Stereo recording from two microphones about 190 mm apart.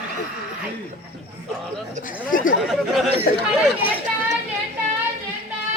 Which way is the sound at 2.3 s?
45° left (ahead or behind).